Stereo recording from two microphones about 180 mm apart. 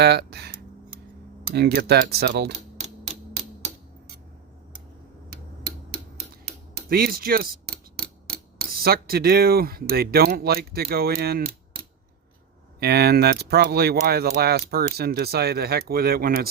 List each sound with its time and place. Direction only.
0.0 s speech: 65° right (ahead or behind)
6.7 s speech: 60° right (ahead or behind)